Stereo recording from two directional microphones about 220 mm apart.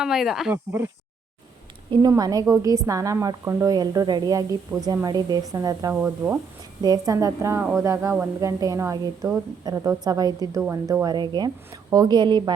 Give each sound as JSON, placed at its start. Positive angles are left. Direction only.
{"t": 0.0, "sound": "speech", "side_deg": 0}
{"t": 1.9, "sound": "a woman's voice", "side_deg": -20}